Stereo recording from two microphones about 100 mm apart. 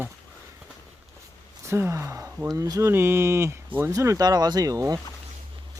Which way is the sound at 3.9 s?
30° right (ahead or behind).